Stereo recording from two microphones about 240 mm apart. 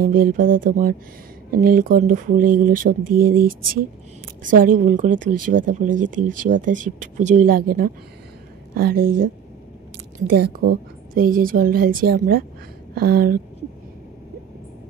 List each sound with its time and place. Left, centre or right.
0.0 s speech: right
8.7 s speech: right